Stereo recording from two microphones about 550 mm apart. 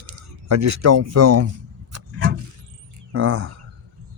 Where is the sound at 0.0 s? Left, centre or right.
Right.